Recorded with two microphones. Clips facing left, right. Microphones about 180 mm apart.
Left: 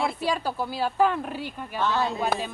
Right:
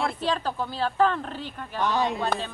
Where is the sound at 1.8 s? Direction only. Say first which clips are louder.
Right 1 dB; 15° right (ahead or behind).